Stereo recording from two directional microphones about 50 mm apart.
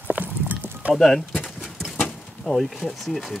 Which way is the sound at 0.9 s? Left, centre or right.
Centre.